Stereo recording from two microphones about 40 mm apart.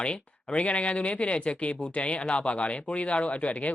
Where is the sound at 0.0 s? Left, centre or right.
Left.